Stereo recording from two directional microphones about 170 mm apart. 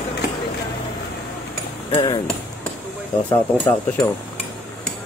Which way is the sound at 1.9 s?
30° left (ahead or behind).